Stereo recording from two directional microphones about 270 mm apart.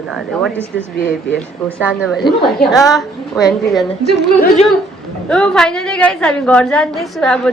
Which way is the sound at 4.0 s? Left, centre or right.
Left.